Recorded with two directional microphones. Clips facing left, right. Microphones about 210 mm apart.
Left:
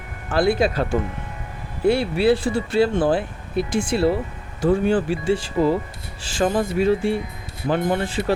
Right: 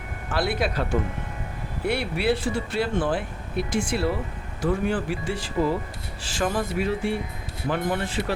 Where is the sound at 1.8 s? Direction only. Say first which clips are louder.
Left 7 dB; 30° left (ahead or behind).